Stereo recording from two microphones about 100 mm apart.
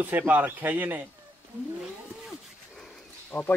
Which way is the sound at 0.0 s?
20° right (ahead or behind).